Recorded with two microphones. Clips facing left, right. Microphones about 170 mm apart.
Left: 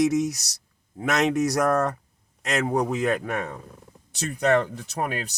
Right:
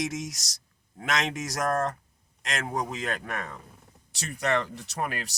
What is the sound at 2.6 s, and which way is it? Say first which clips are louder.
Speech: left 8 dB; 65° left (ahead or behind).